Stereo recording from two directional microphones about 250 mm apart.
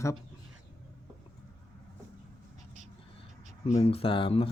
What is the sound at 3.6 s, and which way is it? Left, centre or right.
Speech, left.